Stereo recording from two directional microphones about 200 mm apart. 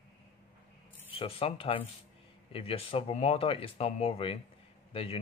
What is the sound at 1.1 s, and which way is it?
Speech, 25° left (ahead or behind).